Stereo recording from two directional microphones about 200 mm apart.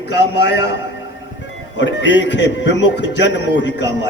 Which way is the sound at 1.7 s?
65° left (ahead or behind).